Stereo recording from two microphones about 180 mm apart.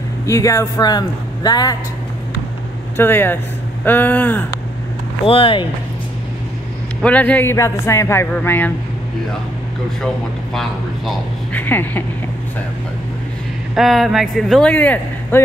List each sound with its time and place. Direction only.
0.3 s speech: 20° left (ahead or behind)
3.0 s a man's voice: 10° left (ahead or behind)
5.2 s speech: 30° left (ahead or behind)
7.0 s a man's voice: 10° left (ahead or behind)
10.0 s a man's voice: centre (ahead or behind)
13.7 s speech: centre (ahead or behind)